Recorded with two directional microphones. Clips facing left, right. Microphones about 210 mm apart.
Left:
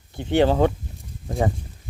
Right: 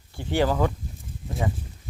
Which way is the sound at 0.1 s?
20° left (ahead or behind).